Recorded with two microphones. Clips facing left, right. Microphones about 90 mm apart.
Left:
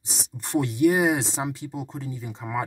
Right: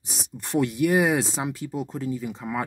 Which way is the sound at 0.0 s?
30° left (ahead or behind).